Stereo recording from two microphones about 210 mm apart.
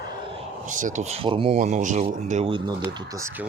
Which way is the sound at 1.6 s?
35° right (ahead or behind).